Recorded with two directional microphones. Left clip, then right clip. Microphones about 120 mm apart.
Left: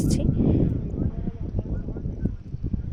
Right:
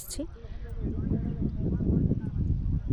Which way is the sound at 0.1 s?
20° right (ahead or behind).